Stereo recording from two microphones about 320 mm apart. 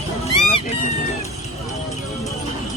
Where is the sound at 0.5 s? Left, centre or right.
Centre.